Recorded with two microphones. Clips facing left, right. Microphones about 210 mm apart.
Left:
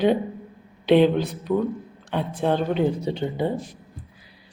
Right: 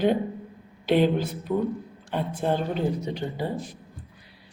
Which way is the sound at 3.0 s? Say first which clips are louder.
Left 5 dB; 25° left (ahead or behind).